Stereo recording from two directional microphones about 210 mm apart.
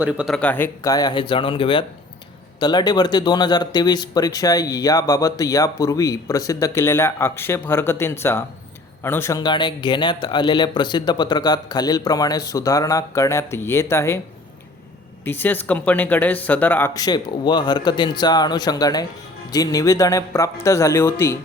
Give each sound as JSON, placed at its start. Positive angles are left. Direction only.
{"t": 0.0, "sound": "speech", "side_deg": -5}
{"t": 15.2, "sound": "speech", "side_deg": 10}